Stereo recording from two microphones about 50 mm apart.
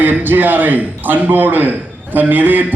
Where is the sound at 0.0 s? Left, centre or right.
Right.